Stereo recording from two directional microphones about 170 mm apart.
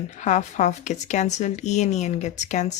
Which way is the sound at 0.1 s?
45° left (ahead or behind).